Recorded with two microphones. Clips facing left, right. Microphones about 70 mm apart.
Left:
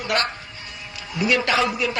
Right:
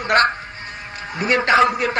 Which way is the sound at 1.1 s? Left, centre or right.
Right.